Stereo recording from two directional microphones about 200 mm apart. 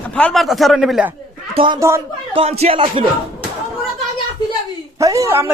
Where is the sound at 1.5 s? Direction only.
25° right (ahead or behind).